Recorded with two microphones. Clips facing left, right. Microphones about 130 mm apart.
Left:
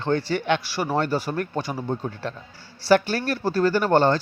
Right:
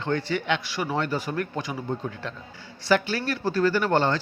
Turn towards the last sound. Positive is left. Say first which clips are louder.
# left 3 dB
turn(degrees=40)  # may be behind; listen again after turning